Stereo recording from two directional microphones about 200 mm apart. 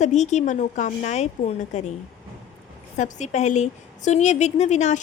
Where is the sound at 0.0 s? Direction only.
35° left (ahead or behind).